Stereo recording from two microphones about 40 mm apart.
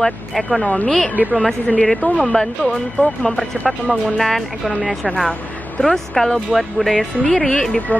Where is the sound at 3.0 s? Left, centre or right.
Left.